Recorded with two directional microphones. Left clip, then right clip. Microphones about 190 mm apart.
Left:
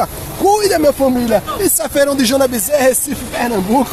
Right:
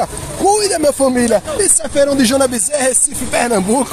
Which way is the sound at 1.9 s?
20° left (ahead or behind).